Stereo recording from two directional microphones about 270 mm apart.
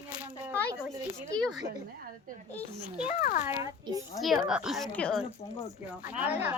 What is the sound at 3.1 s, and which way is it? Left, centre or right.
Speech, left.